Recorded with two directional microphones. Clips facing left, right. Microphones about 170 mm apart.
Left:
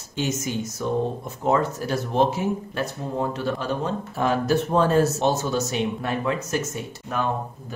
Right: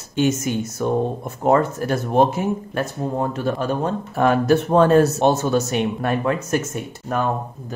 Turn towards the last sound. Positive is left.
turn(degrees=-55)  # may be behind; listen again after turning